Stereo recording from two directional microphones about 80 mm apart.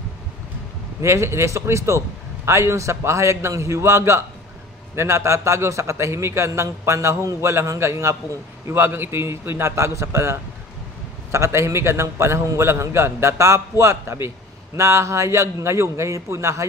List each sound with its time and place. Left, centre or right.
1.0 s a man's voice: right